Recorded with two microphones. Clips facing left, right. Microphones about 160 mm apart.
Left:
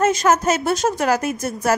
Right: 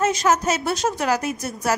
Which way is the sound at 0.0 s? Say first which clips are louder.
Left 3 dB; 50° left (ahead or behind).